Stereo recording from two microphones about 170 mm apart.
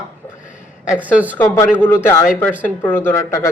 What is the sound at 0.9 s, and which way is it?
Speech, 10° right (ahead or behind).